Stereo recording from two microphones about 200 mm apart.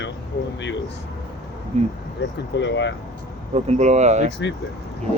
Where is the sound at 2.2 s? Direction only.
60° left (ahead or behind).